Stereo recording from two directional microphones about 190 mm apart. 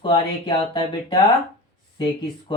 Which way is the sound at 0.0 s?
25° left (ahead or behind).